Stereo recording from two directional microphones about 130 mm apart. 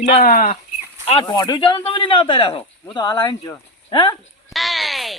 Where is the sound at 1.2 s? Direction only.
30° left (ahead or behind).